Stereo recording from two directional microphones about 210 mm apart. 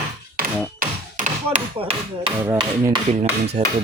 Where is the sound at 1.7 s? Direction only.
25° right (ahead or behind).